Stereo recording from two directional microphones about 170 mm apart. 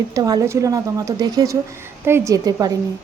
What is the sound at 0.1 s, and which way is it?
Speech, 20° right (ahead or behind).